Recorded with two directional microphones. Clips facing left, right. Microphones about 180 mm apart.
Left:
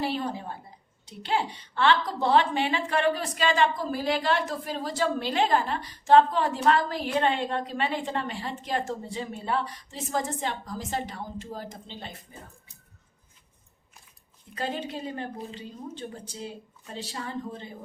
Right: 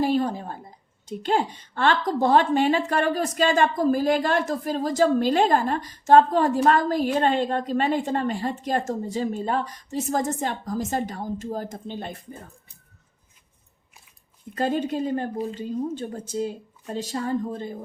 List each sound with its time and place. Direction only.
0.0 s a woman's voice: 45° right (ahead or behind)
14.5 s a woman's voice: 45° right (ahead or behind)